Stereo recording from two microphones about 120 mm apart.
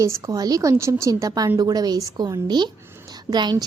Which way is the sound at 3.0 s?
35° right (ahead or behind).